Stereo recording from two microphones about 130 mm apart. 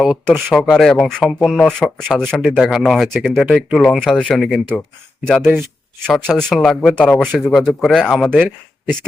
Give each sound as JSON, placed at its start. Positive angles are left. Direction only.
{"t": 0.4, "sound": "speech", "side_deg": 0}
{"t": 5.4, "sound": "speech", "side_deg": -15}
{"t": 6.1, "sound": "speech", "side_deg": 5}
{"t": 8.3, "sound": "speech", "side_deg": -10}